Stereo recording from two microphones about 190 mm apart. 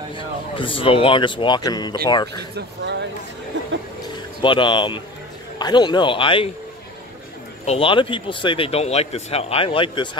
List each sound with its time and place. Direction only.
0.1 s speech: 25° left (ahead or behind)
2.5 s speech: 65° right (ahead or behind)
4.4 s speech: 25° left (ahead or behind)
7.6 s speech: 30° left (ahead or behind)